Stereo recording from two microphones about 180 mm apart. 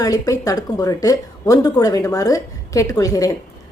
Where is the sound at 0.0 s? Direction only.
20° left (ahead or behind).